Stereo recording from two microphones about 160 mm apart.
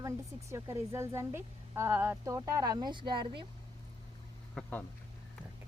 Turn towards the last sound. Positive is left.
turn(degrees=5)  # may be behind; listen again after turning